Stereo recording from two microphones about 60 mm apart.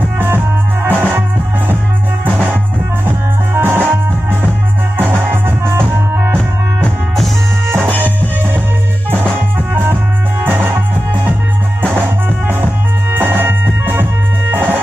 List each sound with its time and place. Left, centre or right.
0.8 s music: right
3.1 s music: right
4.9 s music: right
9.1 s music: right
13.1 s music: right